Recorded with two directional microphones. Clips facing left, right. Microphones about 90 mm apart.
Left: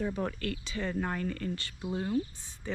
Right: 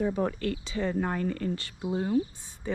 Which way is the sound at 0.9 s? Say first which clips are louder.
Right 4 dB; 35° right (ahead or behind).